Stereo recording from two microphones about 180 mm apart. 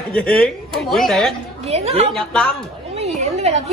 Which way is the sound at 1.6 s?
35° right (ahead or behind).